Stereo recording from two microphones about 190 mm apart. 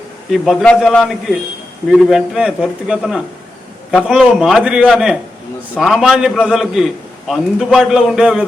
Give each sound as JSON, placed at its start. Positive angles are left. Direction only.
{"t": 0.3, "sound": "a man's voice", "side_deg": 5}